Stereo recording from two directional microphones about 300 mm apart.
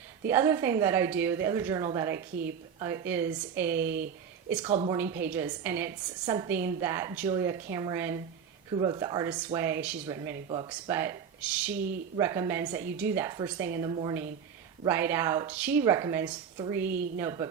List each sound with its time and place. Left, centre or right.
0.3 s speech: centre
4.6 s a woman's voice: centre
4.9 s speech: centre